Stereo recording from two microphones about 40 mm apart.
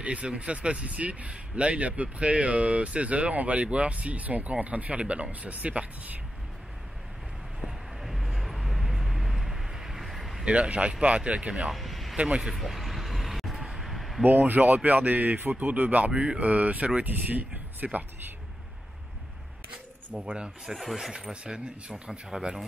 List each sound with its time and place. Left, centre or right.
0.0 s speech: right
7.6 s vehicle: centre
10.4 s speech: right
11.7 s a sound: centre
12.5 s vehicle: centre
13.6 s a sound: centre
14.2 s speech: right
19.7 s speech: right
20.7 s speech: centre
21.1 s speech: right
22.3 s speech: centre